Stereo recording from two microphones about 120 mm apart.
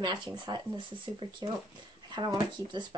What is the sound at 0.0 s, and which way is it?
Speech, 35° right (ahead or behind).